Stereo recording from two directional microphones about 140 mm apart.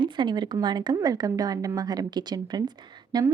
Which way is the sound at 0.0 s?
35° right (ahead or behind).